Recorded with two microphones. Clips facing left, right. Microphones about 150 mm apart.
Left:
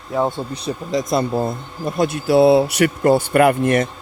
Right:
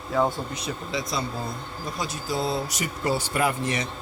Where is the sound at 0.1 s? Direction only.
20° left (ahead or behind); by 3.8 s 55° left (ahead or behind).